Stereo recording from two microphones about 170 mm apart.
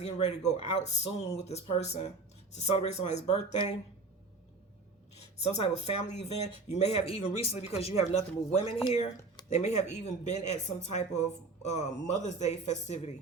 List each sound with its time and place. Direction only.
0.0 s speech: 40° left (ahead or behind)
5.4 s speech: 40° left (ahead or behind)